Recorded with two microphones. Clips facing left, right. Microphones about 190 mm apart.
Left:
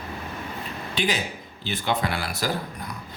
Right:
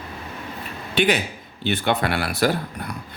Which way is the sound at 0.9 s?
65° right (ahead or behind).